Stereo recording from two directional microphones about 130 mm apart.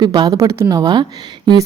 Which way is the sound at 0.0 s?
35° right (ahead or behind).